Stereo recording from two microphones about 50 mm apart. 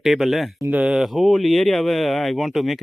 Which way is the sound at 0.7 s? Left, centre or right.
Right.